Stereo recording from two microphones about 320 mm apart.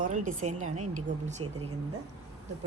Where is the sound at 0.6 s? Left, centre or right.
Right.